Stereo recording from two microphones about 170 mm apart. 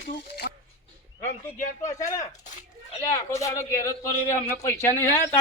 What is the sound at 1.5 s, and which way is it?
Speech, 50° left (ahead or behind).